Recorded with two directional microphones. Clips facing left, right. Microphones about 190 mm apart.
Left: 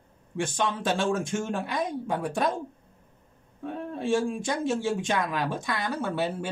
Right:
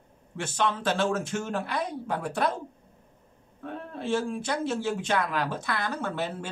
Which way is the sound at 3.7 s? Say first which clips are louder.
Left 3 dB; 15° left (ahead or behind).